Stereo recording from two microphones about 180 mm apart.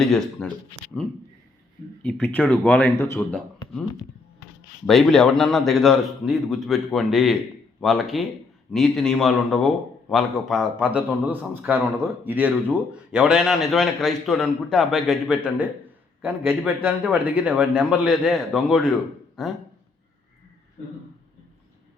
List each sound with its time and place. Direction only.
0.0 s a man's voice: centre (ahead or behind)
0.7 s speech: 25° left (ahead or behind)
2.0 s speech: 10° left (ahead or behind)
4.9 s a man's voice: centre (ahead or behind)